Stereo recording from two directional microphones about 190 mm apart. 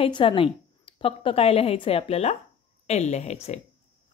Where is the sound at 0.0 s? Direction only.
25° left (ahead or behind).